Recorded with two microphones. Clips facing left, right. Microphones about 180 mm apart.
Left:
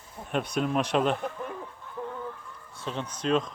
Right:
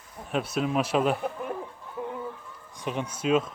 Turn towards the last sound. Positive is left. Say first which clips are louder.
# right 2 dB
turn(degrees=-5)  # may be behind; listen again after turning